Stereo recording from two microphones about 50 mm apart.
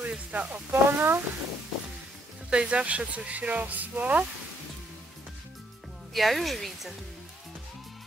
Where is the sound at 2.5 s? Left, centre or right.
Right.